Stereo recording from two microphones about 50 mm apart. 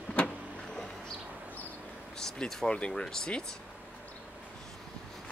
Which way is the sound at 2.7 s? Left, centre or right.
Centre.